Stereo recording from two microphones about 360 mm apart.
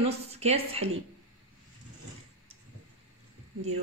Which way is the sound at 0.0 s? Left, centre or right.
Centre.